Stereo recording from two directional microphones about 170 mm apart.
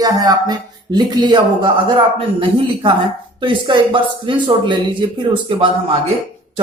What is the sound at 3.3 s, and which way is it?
Speech, 30° right (ahead or behind).